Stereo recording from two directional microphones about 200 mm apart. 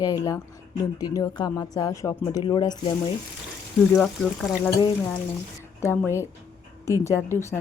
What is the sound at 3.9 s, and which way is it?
Speech, centre (ahead or behind).